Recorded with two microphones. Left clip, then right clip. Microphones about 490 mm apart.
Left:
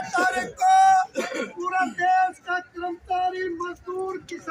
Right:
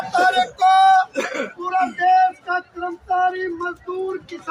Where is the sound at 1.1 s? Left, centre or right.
Left.